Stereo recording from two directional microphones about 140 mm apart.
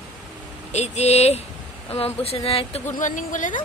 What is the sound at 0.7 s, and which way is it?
Speech, 50° left (ahead or behind).